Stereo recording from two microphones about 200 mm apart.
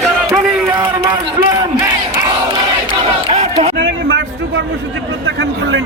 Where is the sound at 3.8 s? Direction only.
65° right (ahead or behind).